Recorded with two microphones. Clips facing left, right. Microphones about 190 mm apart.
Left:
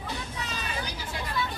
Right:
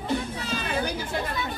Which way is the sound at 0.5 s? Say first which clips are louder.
Right 10 dB; 55° right (ahead or behind).